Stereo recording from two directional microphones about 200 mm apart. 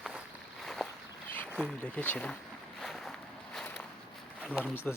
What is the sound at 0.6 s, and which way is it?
Boat, centre (ahead or behind).